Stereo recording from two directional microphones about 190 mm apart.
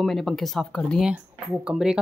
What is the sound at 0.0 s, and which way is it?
Speech, centre (ahead or behind).